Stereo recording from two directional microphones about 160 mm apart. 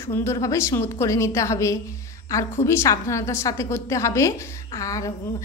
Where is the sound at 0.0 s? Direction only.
15° left (ahead or behind).